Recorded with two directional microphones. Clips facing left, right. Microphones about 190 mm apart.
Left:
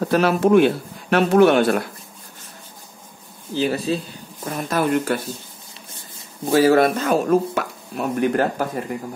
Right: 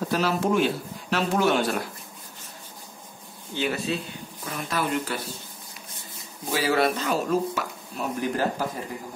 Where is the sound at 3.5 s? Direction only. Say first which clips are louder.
Left 6 dB; 35° left (ahead or behind); by 5.2 s 50° left (ahead or behind).